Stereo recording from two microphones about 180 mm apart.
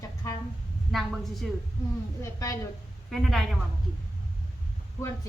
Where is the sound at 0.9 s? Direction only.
Centre (ahead or behind).